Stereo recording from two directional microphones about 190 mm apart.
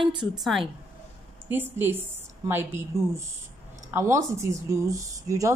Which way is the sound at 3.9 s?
15° right (ahead or behind).